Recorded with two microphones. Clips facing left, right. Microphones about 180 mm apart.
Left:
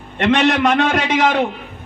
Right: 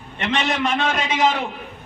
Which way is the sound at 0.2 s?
65° left (ahead or behind).